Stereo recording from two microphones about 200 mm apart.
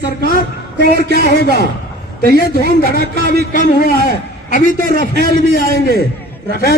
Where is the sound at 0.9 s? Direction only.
55° right (ahead or behind).